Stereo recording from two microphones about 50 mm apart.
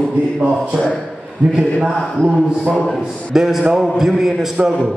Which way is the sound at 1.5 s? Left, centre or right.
Centre.